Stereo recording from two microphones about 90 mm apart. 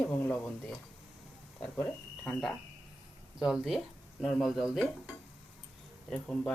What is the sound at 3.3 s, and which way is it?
Speech, 5° right (ahead or behind).